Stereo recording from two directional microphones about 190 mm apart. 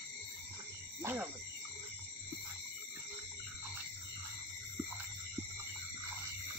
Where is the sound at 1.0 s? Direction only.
10° right (ahead or behind).